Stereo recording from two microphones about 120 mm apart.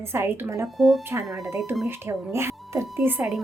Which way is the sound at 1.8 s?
20° right (ahead or behind).